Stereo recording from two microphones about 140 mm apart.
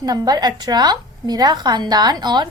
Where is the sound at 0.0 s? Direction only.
30° right (ahead or behind).